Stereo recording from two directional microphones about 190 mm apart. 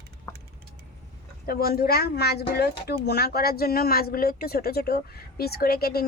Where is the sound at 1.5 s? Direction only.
55° left (ahead or behind).